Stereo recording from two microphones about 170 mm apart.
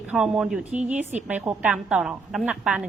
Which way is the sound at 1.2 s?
10° right (ahead or behind).